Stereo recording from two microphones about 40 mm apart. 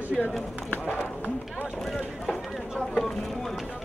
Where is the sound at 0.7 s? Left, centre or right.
Left.